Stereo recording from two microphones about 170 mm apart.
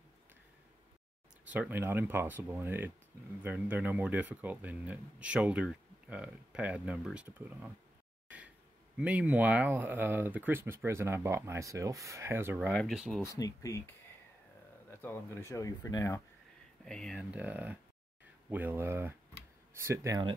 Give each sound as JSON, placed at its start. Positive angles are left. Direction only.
{"t": 1.4, "sound": "speech", "side_deg": -10}
{"t": 8.9, "sound": "speech", "side_deg": -10}
{"t": 13.2, "sound": "speech", "side_deg": 20}
{"t": 15.0, "sound": "speech", "side_deg": 15}
{"t": 16.8, "sound": "speech", "side_deg": 5}